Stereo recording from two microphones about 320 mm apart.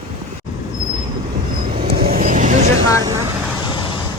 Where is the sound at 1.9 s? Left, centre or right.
Right.